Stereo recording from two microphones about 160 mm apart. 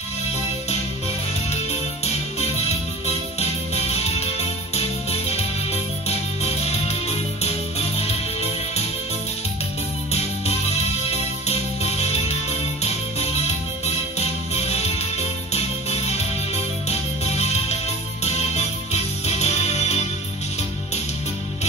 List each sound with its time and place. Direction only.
3.3 s music: 40° left (ahead or behind)
10.1 s music: 40° left (ahead or behind)
17.2 s music: 40° left (ahead or behind)